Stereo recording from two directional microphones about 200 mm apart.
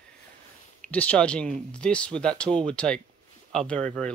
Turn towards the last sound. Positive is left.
turn(degrees=5)  # may be behind; listen again after turning